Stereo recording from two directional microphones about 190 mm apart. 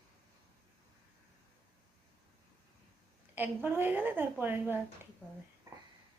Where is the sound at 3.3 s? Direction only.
10° right (ahead or behind).